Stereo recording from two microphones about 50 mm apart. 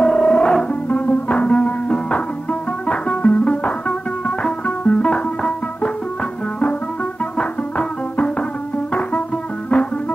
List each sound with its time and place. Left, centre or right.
0.0 s music: left
7.3 s music: left